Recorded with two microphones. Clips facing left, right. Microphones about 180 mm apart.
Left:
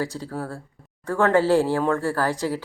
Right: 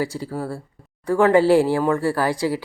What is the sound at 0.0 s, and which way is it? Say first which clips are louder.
Speech: right 3 dB; 10° right (ahead or behind).